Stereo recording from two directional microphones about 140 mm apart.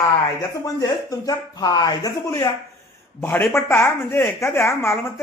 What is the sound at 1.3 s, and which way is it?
A man's voice, 30° left (ahead or behind).